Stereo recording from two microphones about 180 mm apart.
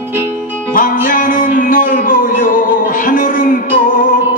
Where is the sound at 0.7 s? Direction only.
50° left (ahead or behind).